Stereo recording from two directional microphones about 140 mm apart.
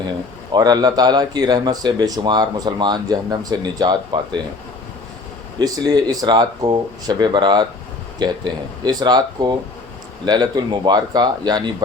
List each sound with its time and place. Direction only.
0.5 s speech: 30° right (ahead or behind)
5.5 s speech: 30° right (ahead or behind)